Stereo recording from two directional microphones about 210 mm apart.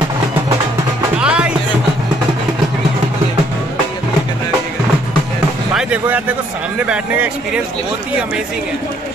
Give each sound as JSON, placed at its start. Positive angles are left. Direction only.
{"t": 1.2, "sound": "music", "side_deg": -5}
{"t": 5.8, "sound": "a sound", "side_deg": -5}
{"t": 6.9, "sound": "speech", "side_deg": -5}